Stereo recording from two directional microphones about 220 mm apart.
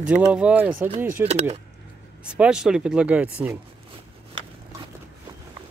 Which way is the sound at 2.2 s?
5° right (ahead or behind).